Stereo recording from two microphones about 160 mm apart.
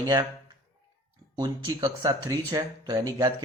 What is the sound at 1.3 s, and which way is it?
A man's voice, 25° right (ahead or behind).